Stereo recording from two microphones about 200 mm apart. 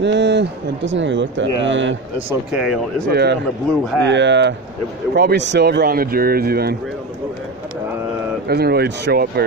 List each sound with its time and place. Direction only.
0.0 s speech: 60° right (ahead or behind)
2.2 s speech: 5° right (ahead or behind)
3.1 s speech: 55° right (ahead or behind)
8.5 s speech: 55° right (ahead or behind)